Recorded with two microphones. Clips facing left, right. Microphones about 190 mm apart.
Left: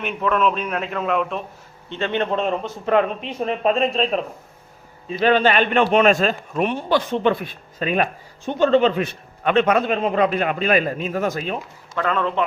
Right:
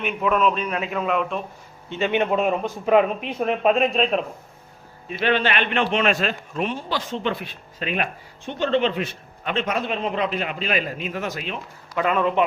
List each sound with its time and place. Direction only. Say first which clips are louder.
0.0 s a man's voice: even; 5° right (ahead or behind)
5.2 s a man's voice: left 5 dB; 40° left (ahead or behind)
11.9 s a man's voice: right 1 dB; 10° right (ahead or behind)